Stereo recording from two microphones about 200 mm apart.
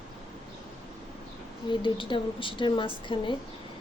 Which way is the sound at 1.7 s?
25° left (ahead or behind).